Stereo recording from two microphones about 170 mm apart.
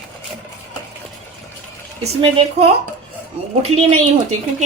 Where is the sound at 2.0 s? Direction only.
35° right (ahead or behind).